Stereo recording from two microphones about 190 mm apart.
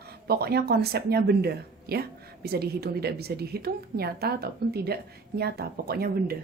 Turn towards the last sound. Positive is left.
turn(degrees=-55)  # may be behind; listen again after turning